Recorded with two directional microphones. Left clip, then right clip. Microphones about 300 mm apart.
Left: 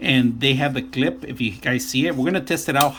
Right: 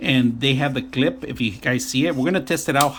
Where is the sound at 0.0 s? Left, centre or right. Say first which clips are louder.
Left 1 dB; centre.